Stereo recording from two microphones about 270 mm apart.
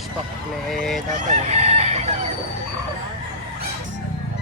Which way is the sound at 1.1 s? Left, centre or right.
Right.